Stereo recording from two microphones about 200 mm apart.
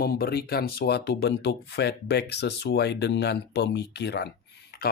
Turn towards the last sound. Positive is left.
turn(degrees=50)  # may be behind; listen again after turning